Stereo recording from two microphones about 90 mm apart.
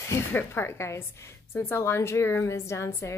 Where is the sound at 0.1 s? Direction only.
20° left (ahead or behind).